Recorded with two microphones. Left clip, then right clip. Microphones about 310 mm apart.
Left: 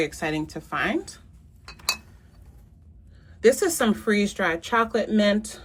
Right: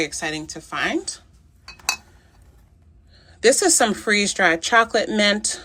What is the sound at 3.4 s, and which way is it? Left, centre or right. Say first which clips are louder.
Speech: right 4 dB; centre.